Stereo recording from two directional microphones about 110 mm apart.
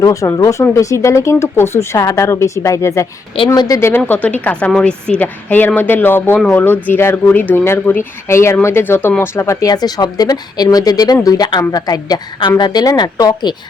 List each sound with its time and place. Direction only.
0.0 s speech: 30° left (ahead or behind)
3.8 s speech: 20° left (ahead or behind); by 13.6 s 40° left (ahead or behind)